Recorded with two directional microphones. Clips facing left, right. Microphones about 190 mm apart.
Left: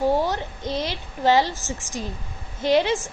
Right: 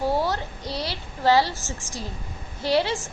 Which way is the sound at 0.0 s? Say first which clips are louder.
Left 3 dB; 15° left (ahead or behind).